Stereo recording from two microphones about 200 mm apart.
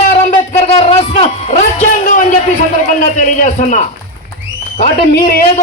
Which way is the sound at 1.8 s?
40° left (ahead or behind).